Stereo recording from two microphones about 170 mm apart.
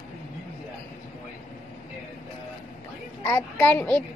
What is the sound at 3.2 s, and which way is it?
Speech, 15° left (ahead or behind).